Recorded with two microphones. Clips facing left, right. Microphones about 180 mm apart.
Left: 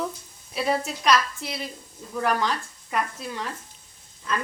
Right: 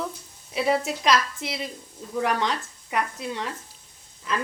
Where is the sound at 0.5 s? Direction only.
20° right (ahead or behind).